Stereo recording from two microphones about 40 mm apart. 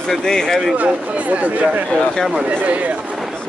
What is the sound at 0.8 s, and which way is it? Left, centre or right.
Speech, right.